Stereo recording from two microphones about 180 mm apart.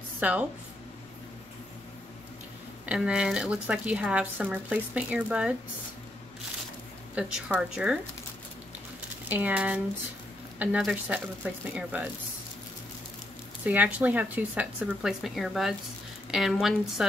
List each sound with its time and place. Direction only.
0.2 s speech: 10° right (ahead or behind)
2.9 s speech: 5° right (ahead or behind)
7.2 s a woman's voice: 5° right (ahead or behind)
9.3 s speech: 10° right (ahead or behind)
13.7 s a woman's voice: 5° right (ahead or behind)